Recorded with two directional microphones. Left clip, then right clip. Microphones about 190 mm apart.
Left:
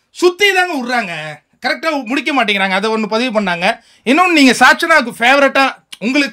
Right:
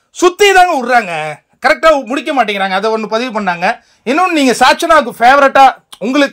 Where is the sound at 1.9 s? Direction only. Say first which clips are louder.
Right 3 dB; centre (ahead or behind).